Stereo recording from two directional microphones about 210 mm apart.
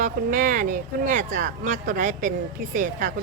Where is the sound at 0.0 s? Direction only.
40° right (ahead or behind).